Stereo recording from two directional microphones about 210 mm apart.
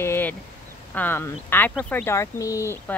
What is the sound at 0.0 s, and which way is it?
Vehicle, 10° left (ahead or behind).